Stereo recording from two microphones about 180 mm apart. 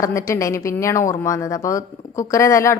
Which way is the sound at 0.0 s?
15° left (ahead or behind).